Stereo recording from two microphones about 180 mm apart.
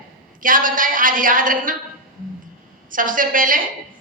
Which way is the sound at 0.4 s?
50° right (ahead or behind).